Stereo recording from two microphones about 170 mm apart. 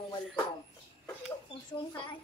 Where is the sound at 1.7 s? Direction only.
25° left (ahead or behind).